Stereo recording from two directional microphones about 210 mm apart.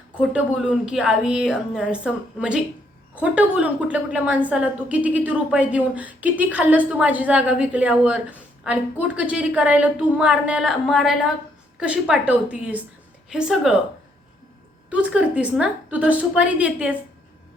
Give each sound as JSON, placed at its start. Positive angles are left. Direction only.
{"t": 0.1, "sound": "a woman's voice", "side_deg": -5}
{"t": 14.8, "sound": "a woman's voice", "side_deg": -5}